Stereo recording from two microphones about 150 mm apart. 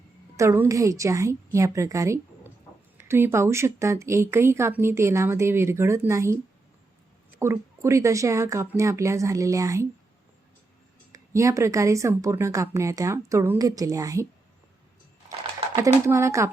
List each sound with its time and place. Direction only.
0.3 s speech: 20° right (ahead or behind)
11.1 s speech: 20° right (ahead or behind)
16.0 s speech: 20° right (ahead or behind)